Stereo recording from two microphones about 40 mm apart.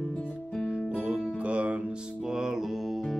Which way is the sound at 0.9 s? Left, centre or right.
Right.